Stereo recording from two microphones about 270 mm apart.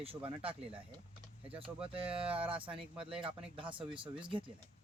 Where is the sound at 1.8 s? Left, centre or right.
Centre.